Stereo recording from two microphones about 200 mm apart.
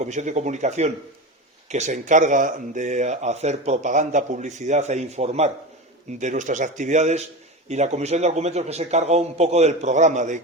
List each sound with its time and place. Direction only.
0.0 s speech: 35° right (ahead or behind)